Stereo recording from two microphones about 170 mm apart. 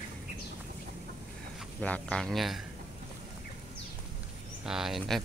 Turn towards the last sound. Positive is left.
turn(degrees=0)  # may be behind; listen again after turning